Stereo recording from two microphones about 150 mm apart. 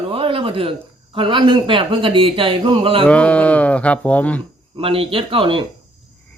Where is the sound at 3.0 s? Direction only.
10° left (ahead or behind).